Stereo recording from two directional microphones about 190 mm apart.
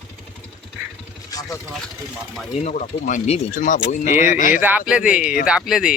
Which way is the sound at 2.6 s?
40° left (ahead or behind).